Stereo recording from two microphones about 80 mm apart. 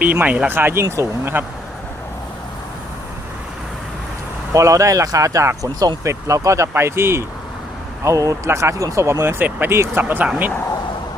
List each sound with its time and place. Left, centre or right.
0.0 s speech: centre
4.5 s speech: right
8.0 s speech: right